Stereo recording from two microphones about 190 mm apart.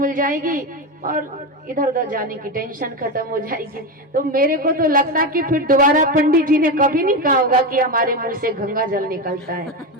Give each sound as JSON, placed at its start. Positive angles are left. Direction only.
{"t": 0.0, "sound": "a woman's voice", "side_deg": -45}